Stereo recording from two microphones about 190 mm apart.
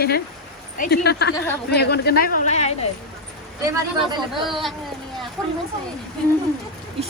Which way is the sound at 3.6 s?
15° right (ahead or behind).